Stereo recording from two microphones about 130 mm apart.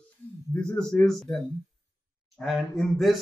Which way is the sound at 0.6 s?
5° left (ahead or behind).